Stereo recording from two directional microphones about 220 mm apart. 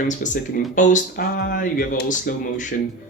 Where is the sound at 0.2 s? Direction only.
35° left (ahead or behind).